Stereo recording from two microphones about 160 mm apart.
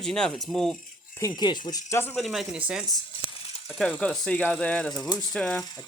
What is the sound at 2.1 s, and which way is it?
Speech, centre (ahead or behind).